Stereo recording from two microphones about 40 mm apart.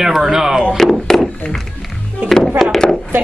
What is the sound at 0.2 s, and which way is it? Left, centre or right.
Speech, centre.